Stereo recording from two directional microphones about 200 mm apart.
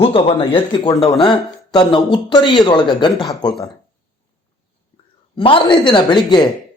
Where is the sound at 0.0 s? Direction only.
30° left (ahead or behind).